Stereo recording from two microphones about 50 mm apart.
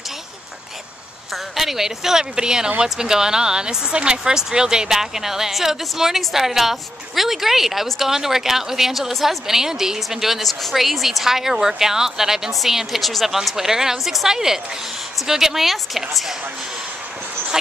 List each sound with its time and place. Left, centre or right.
1.3 s a woman's voice: centre